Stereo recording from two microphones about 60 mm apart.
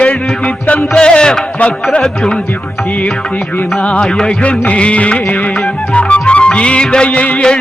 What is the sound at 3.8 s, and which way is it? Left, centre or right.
Music, centre.